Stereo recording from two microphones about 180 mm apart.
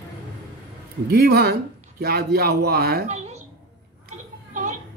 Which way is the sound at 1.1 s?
60° right (ahead or behind).